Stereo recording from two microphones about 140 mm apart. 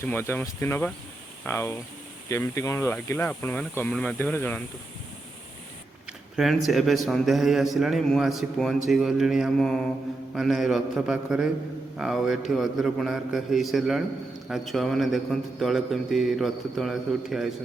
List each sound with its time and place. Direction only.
0.0 s speech: 15° left (ahead or behind)
6.1 s a sound: 5° right (ahead or behind)
6.7 s a man's voice: centre (ahead or behind)